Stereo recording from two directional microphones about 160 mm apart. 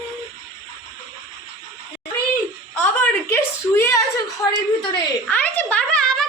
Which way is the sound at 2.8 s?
15° left (ahead or behind).